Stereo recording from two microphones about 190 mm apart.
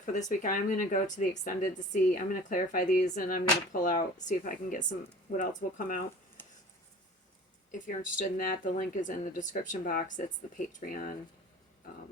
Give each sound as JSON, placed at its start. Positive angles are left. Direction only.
{"t": 0.0, "sound": "speech", "side_deg": 40}
{"t": 6.4, "sound": "a sound", "side_deg": 10}
{"t": 7.7, "sound": "speech", "side_deg": 40}